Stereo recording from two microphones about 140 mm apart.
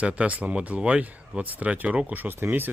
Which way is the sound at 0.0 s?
10° right (ahead or behind).